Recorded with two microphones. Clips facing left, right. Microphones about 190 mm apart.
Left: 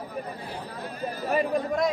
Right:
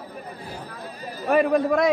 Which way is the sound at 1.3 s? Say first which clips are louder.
Right 7 dB; 70° right (ahead or behind).